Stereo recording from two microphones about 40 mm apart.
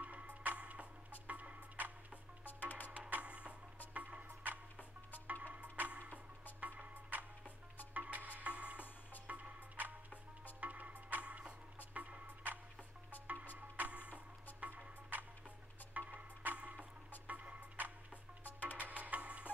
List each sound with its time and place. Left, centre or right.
0.0 s music: right
2.4 s music: left
3.1 s music: right
13.6 s music: right
18.4 s music: left
18.8 s music: right